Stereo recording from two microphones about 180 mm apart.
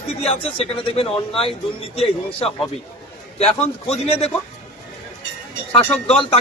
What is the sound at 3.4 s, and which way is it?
Speech, 35° left (ahead or behind).